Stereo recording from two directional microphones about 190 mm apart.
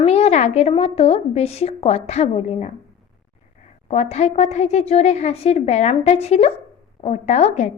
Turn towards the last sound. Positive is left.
turn(degrees=35)  # may be behind; listen again after turning